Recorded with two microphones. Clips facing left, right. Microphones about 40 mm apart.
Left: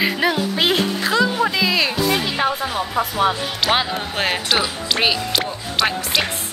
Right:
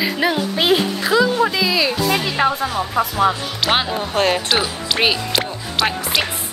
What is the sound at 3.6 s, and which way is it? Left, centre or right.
Speech, centre.